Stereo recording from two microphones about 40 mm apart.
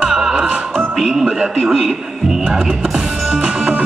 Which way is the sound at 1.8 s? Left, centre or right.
Centre.